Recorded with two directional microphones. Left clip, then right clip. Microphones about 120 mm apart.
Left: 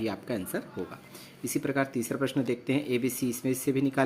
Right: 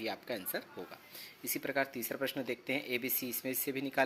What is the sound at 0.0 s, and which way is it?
Speech, 30° right (ahead or behind).